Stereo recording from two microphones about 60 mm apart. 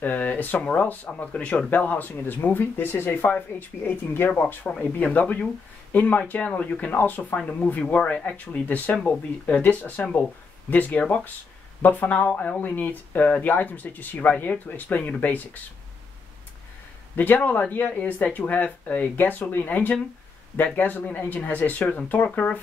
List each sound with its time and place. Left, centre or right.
0.0 s speech: left
4.3 s speech: left
7.3 s speech: centre
17.1 s speech: left